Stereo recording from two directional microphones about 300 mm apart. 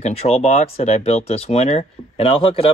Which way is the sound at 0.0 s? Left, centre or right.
Left.